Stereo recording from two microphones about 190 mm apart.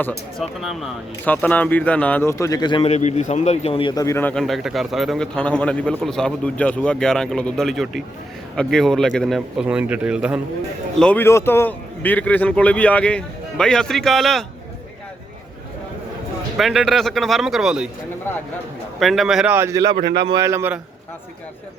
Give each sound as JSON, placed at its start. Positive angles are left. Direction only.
{"t": 0.0, "sound": "a man's voice", "side_deg": 0}
{"t": 11.0, "sound": "speech", "side_deg": 10}
{"t": 16.6, "sound": "a man's voice", "side_deg": 0}
{"t": 18.9, "sound": "a man's voice", "side_deg": 0}
{"t": 19.9, "sound": "a man's voice", "side_deg": -60}
{"t": 20.2, "sound": "a man's voice", "side_deg": -20}